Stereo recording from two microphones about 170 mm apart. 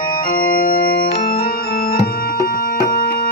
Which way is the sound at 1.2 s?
60° left (ahead or behind).